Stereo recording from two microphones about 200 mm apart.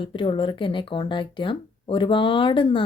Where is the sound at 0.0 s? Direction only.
25° left (ahead or behind).